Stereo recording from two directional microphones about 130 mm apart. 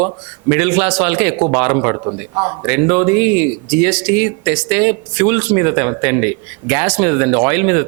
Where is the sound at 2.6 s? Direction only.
20° right (ahead or behind).